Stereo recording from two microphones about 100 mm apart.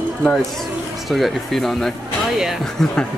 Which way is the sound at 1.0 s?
Centre (ahead or behind).